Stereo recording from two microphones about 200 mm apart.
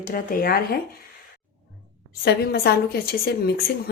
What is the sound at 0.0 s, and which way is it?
Speech, 45° left (ahead or behind).